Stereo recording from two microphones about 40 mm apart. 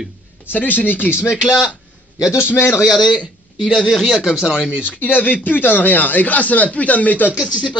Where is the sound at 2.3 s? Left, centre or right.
Left.